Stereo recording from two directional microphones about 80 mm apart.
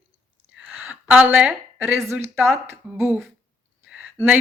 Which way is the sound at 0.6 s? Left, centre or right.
Right.